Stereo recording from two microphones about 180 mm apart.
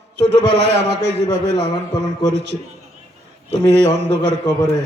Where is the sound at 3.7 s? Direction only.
75° right (ahead or behind).